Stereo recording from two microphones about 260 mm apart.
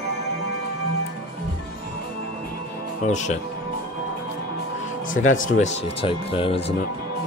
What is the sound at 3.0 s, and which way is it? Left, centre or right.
Speech, left.